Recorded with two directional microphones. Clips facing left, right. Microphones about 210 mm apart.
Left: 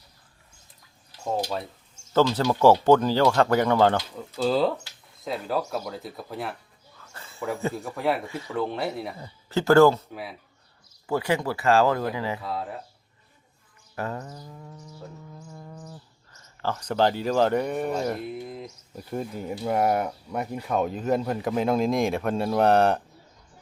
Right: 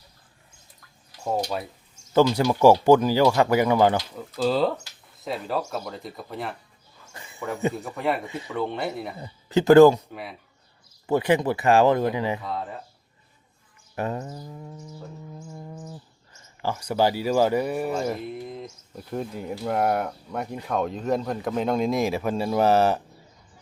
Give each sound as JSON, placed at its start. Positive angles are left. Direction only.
{"t": 2.1, "sound": "speech", "side_deg": -10}
{"t": 7.1, "sound": "a sound", "side_deg": -15}
{"t": 7.7, "sound": "speech", "side_deg": 0}
{"t": 8.3, "sound": "speech", "side_deg": -20}
{"t": 8.5, "sound": "speech", "side_deg": 0}
{"t": 9.1, "sound": "speech", "side_deg": -20}
{"t": 10.1, "sound": "speech", "side_deg": 0}
{"t": 11.0, "sound": "speech", "side_deg": -20}
{"t": 12.4, "sound": "speech", "side_deg": 5}
{"t": 13.9, "sound": "speech", "side_deg": -20}
{"t": 15.4, "sound": "a sound", "side_deg": -25}
{"t": 16.6, "sound": "speech", "side_deg": -10}